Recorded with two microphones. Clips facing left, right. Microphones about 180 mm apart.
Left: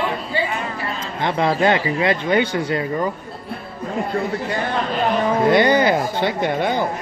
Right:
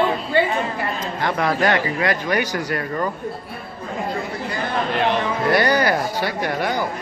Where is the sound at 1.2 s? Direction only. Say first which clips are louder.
Left 2 dB; 25° left (ahead or behind).